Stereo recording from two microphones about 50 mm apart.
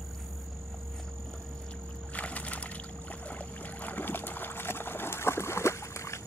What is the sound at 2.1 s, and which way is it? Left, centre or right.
Boat, left.